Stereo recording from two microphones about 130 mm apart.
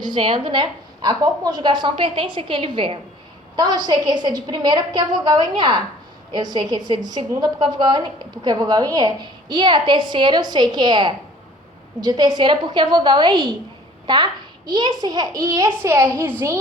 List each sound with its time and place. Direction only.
0.0 s a woman's voice: 35° right (ahead or behind)